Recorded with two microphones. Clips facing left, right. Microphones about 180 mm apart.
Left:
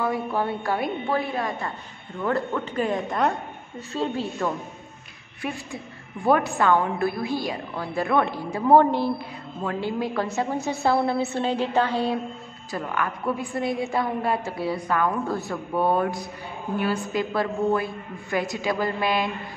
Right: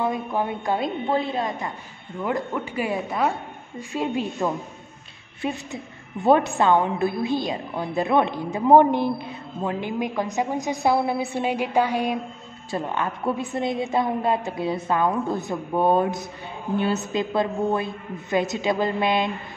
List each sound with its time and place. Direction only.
0.0 s a woman's voice: 20° right (ahead or behind)
3.9 s a woman's voice: 15° right (ahead or behind)
12.7 s a woman's voice: 25° right (ahead or behind)